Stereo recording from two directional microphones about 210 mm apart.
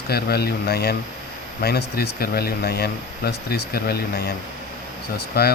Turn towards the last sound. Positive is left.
turn(degrees=50)  # may be behind; listen again after turning